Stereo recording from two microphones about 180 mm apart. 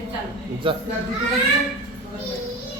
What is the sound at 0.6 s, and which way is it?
Speech, 30° right (ahead or behind).